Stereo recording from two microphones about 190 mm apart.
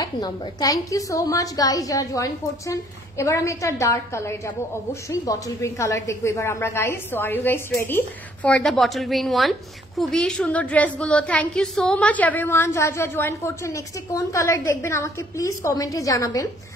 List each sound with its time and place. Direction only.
0.0 s a woman's voice: 20° left (ahead or behind)